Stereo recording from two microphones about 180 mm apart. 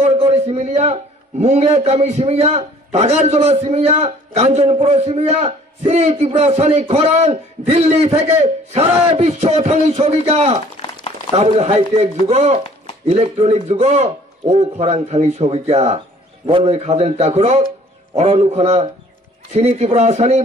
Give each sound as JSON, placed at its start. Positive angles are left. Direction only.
{"t": 0.0, "sound": "a man's voice", "side_deg": -35}